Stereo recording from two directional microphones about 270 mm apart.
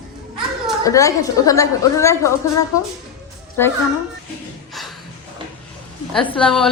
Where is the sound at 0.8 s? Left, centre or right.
Centre.